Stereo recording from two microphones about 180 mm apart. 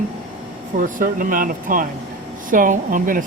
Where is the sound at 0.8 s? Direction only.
50° right (ahead or behind).